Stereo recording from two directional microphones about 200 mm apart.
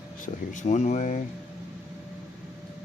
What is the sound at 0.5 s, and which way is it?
Speech, 35° left (ahead or behind).